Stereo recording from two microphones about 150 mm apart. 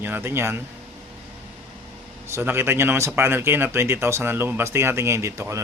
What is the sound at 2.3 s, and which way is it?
Speech, 15° right (ahead or behind).